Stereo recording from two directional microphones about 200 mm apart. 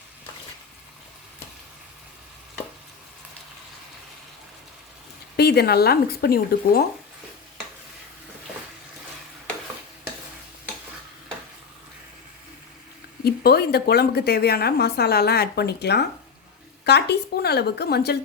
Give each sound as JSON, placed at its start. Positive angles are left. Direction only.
{"t": 5.4, "sound": "a woman's voice", "side_deg": 55}
{"t": 13.2, "sound": "a woman's voice", "side_deg": 50}